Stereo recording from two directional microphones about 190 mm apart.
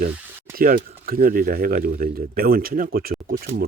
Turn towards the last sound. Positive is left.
turn(degrees=-50)  # may be behind; listen again after turning